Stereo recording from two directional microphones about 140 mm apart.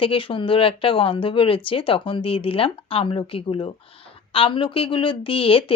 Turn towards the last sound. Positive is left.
turn(degrees=40)  # may be behind; listen again after turning